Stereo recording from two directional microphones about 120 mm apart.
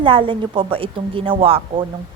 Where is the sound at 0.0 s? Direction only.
45° right (ahead or behind).